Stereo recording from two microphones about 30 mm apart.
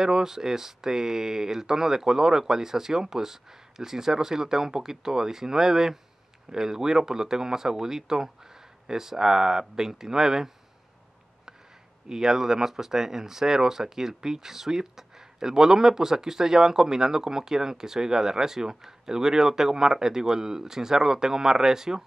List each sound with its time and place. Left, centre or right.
0.0 s speech: centre
12.1 s speech: centre